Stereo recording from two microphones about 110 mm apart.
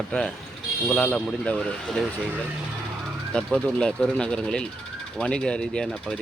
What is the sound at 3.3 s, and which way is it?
Speech, 10° left (ahead or behind).